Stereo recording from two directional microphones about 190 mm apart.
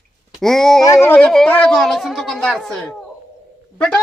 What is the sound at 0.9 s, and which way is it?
Speech, 10° left (ahead or behind).